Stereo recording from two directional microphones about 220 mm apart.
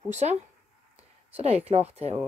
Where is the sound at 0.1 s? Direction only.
30° right (ahead or behind).